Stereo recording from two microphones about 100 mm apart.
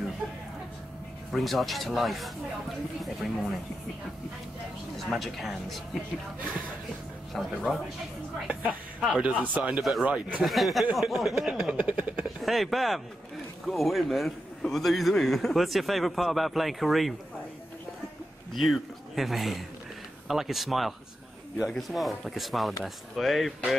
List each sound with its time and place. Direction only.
1.3 s a man's voice: centre (ahead or behind)
4.9 s a man's voice: centre (ahead or behind)
7.3 s a man's voice: centre (ahead or behind)
8.5 s a sound: 20° right (ahead or behind)
9.2 s speech: 15° right (ahead or behind)
10.0 s speech: 15° right (ahead or behind)
10.4 s a man's voice: centre (ahead or behind)
11.7 s speech: 15° right (ahead or behind)
12.4 s a man's voice: centre (ahead or behind)
18.5 s a man's voice: centre (ahead or behind)